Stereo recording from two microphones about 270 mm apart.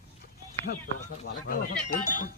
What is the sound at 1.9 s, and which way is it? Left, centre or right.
Speech, left.